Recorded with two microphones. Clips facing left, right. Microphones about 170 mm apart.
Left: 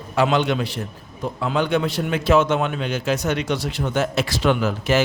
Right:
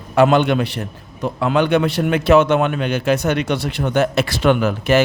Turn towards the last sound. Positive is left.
turn(degrees=-60)  # may be behind; listen again after turning